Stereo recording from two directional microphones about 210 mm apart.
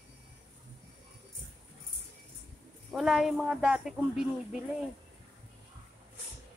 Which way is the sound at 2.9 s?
Centre (ahead or behind).